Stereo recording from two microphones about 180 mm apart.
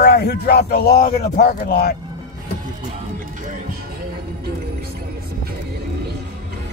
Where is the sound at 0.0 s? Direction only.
60° left (ahead or behind).